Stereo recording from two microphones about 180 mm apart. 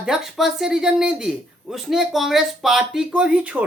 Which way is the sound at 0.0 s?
Centre (ahead or behind).